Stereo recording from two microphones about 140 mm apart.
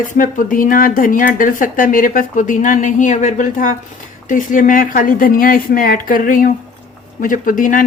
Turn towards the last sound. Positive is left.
turn(degrees=75)  # may be behind; listen again after turning